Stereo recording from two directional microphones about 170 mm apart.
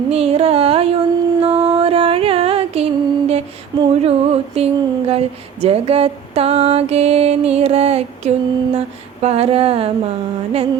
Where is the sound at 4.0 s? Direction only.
35° right (ahead or behind).